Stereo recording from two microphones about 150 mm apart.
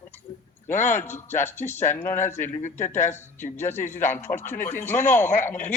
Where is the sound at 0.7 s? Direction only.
55° left (ahead or behind).